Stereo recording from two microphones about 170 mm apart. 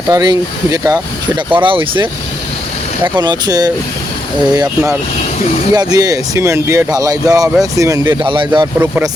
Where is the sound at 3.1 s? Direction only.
25° right (ahead or behind).